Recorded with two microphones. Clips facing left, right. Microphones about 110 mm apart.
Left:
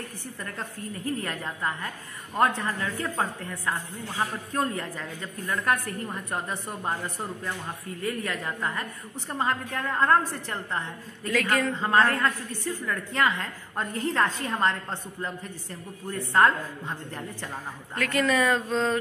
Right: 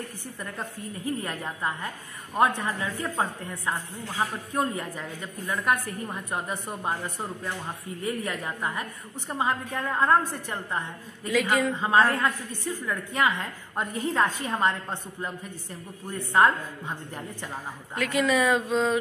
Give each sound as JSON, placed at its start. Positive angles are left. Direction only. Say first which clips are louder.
{"t": 1.0, "sound": "a woman's voice", "louder": "even", "side_deg": -20}
{"t": 14.0, "sound": "a woman's voice", "louder": "even", "side_deg": -5}
{"t": 16.3, "sound": "a woman's voice", "louder": "even", "side_deg": -15}